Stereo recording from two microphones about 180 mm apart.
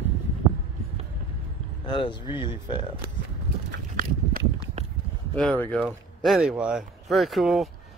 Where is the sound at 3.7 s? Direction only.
50° right (ahead or behind).